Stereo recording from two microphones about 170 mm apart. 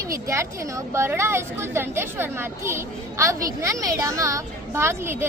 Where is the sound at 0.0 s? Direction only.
15° right (ahead or behind).